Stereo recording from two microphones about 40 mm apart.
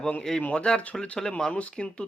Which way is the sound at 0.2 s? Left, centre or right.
Centre.